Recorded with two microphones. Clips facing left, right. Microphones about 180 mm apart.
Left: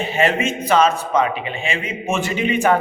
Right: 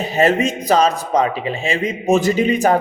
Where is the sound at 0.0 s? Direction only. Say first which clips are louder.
Right 3 dB; 40° right (ahead or behind).